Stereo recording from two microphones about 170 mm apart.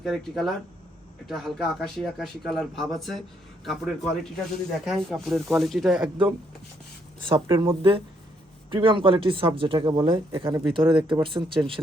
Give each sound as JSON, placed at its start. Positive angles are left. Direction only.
{"t": 0.0, "sound": "speech", "side_deg": 0}
{"t": 7.3, "sound": "speech", "side_deg": -30}